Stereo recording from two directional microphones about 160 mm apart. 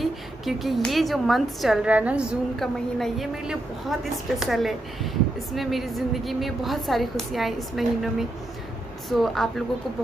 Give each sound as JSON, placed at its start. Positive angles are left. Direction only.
{"t": 0.0, "sound": "a woman's voice", "side_deg": 0}